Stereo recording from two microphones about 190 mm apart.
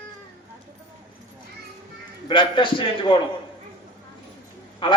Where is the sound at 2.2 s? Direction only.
25° left (ahead or behind).